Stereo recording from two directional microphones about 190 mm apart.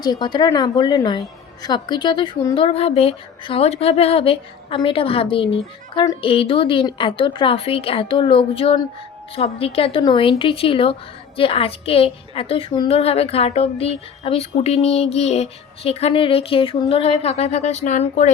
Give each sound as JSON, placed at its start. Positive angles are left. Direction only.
{"t": 0.0, "sound": "a woman's voice", "side_deg": 20}